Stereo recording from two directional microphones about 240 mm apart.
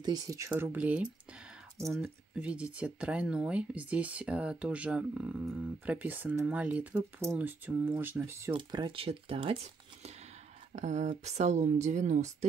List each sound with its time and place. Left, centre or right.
0.0 s speech: centre
10.7 s speech: right